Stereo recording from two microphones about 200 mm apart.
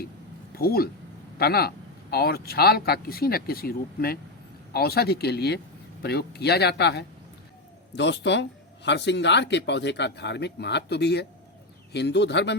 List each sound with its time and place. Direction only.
0.5 s speech: 50° left (ahead or behind)